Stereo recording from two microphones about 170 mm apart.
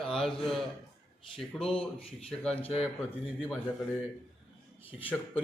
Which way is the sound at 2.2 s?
5° left (ahead or behind).